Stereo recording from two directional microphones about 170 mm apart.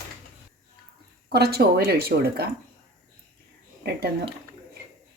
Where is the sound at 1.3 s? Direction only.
65° right (ahead or behind).